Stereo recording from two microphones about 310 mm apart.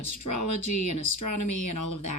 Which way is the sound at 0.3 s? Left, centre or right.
Left.